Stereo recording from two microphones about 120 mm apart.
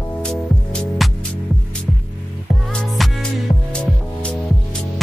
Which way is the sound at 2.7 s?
5° left (ahead or behind).